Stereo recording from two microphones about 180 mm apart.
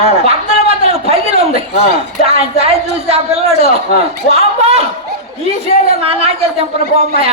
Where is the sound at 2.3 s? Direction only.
35° right (ahead or behind).